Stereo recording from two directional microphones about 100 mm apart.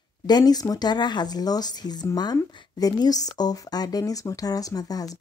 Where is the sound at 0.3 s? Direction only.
40° left (ahead or behind).